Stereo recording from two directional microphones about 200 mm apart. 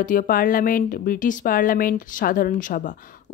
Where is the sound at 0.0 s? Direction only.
45° left (ahead or behind).